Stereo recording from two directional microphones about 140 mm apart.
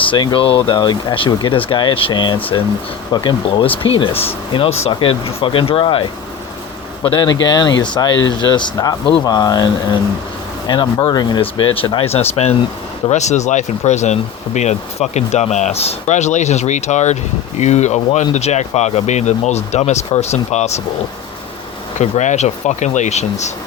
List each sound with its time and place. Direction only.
0.1 s speech: 35° left (ahead or behind)
10.7 s speech: 35° left (ahead or behind); by 20.8 s 50° left (ahead or behind)
21.9 s speech: 60° left (ahead or behind)